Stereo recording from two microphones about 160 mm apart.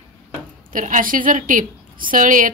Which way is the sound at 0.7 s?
55° right (ahead or behind).